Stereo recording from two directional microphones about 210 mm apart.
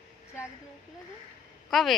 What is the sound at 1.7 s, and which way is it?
Speech, centre (ahead or behind).